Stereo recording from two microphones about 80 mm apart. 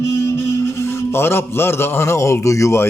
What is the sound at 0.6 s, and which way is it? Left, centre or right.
A man's voice, left.